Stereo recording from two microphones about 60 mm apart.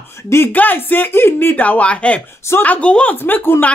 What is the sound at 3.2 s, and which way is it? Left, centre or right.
Speech, left.